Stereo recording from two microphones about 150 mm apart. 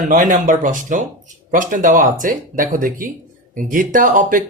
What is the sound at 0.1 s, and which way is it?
Speech, 60° right (ahead or behind).